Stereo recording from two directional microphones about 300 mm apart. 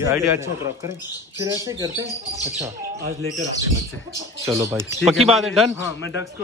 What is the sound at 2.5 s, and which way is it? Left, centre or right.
Speech, centre.